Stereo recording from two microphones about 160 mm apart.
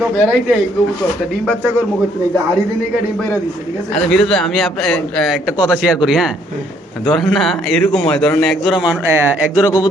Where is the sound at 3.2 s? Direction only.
10° left (ahead or behind); by 9.7 s 10° right (ahead or behind).